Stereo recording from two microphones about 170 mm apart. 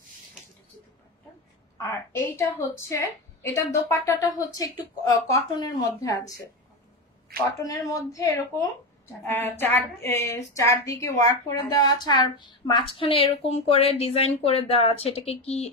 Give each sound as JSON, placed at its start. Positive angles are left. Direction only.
{"t": 1.8, "sound": "a woman's voice", "side_deg": 15}
{"t": 7.6, "sound": "a woman's voice", "side_deg": 20}